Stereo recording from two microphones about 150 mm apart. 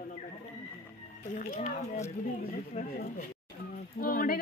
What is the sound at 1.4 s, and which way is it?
Speech, 60° left (ahead or behind).